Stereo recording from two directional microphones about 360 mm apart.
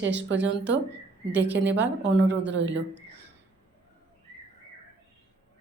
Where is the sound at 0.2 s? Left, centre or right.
Right.